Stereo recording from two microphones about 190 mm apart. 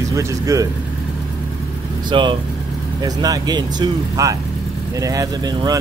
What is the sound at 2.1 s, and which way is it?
Speech, 25° right (ahead or behind).